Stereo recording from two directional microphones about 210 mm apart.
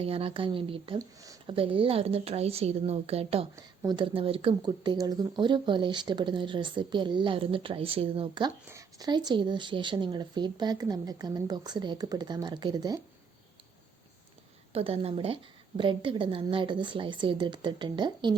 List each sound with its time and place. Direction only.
0.0 s speech: 25° right (ahead or behind)
14.7 s speech: 25° right (ahead or behind)